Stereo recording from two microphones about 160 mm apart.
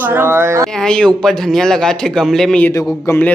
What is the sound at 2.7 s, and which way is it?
Speech, 20° left (ahead or behind).